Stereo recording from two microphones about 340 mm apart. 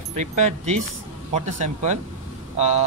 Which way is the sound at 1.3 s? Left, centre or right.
Centre.